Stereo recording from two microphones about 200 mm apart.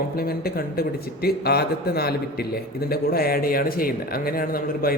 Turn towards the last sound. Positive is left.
turn(degrees=45)  # may be behind; listen again after turning